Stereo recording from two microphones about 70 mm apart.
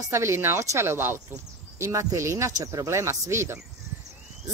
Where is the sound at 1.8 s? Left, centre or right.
Right.